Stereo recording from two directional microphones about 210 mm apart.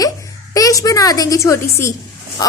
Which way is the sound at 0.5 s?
15° left (ahead or behind).